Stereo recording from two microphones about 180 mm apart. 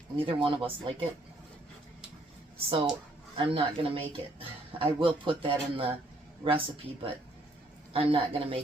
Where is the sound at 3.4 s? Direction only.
30° right (ahead or behind).